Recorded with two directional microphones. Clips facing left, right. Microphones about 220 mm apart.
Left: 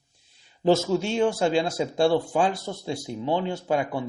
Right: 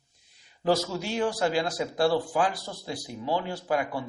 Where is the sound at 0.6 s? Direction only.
25° left (ahead or behind).